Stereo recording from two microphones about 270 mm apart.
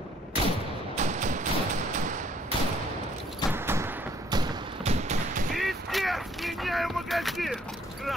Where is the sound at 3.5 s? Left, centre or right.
Centre; by 5.4 s right.